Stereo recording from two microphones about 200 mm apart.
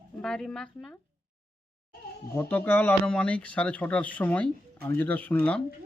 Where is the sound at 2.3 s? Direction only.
10° left (ahead or behind).